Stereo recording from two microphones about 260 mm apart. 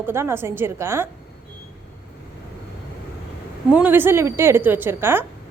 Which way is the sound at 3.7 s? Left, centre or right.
Centre.